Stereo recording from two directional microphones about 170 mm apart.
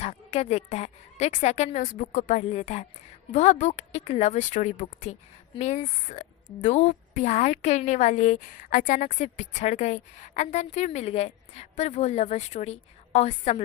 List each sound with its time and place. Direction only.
0.0 s a woman's voice: 40° left (ahead or behind)